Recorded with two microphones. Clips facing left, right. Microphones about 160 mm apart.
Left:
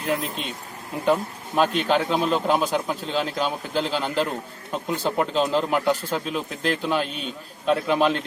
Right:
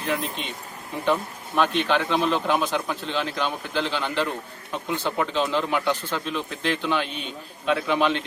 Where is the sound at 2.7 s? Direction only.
5° left (ahead or behind).